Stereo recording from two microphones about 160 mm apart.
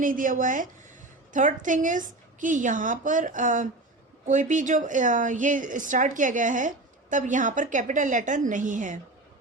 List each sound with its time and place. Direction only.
0.0 s a woman's voice: 55° right (ahead or behind)